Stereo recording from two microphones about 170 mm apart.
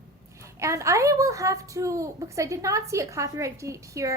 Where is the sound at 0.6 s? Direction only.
15° right (ahead or behind).